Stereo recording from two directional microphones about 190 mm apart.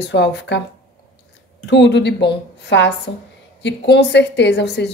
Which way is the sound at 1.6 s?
65° left (ahead or behind).